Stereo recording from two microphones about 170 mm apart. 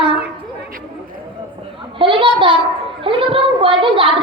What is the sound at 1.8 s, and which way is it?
A woman's voice, 30° right (ahead or behind).